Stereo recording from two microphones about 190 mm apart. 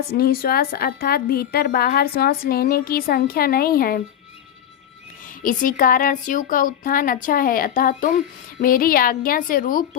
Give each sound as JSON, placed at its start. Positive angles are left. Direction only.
{"t": 0.1, "sound": "a woman's voice", "side_deg": 55}
{"t": 5.4, "sound": "a woman's voice", "side_deg": 45}